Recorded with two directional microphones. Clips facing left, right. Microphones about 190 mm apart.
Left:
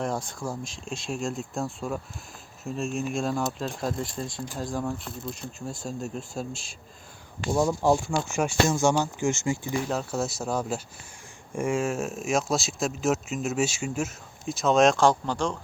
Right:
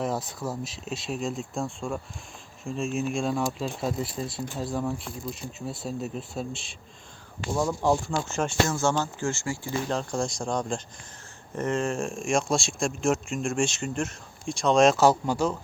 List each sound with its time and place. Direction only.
0.0 s speech: 5° right (ahead or behind)
7.5 s speech: 10° left (ahead or behind)
9.9 s speech: 5° left (ahead or behind)